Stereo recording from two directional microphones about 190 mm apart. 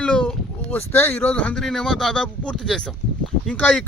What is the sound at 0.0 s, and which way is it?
Speech, 5° left (ahead or behind).